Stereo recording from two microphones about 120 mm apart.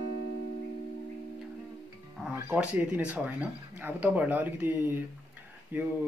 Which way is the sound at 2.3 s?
15° right (ahead or behind).